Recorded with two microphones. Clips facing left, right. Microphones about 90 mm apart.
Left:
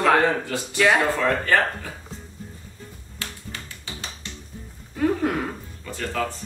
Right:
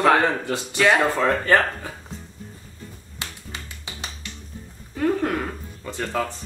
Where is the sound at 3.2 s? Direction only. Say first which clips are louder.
Even; 20° right (ahead or behind).